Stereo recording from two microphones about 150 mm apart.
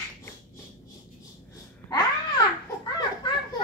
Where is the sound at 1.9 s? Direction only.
25° left (ahead or behind).